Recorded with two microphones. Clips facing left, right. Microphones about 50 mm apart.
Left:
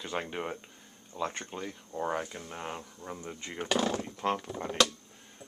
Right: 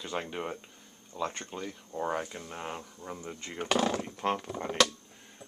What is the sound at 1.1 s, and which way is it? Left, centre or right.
Speech, left.